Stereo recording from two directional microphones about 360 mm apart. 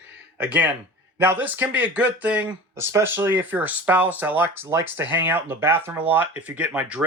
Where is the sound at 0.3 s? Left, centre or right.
Centre.